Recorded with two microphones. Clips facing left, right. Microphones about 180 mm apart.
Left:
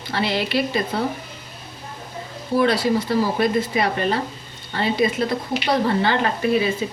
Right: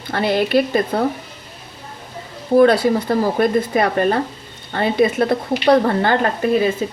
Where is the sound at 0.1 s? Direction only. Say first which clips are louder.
Right 6 dB; 50° right (ahead or behind).